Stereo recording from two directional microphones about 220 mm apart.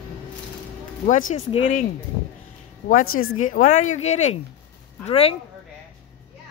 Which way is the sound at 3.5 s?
35° left (ahead or behind).